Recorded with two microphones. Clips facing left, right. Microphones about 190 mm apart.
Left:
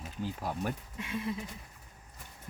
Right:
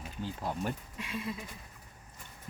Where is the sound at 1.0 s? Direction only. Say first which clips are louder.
Left 2 dB; 20° left (ahead or behind).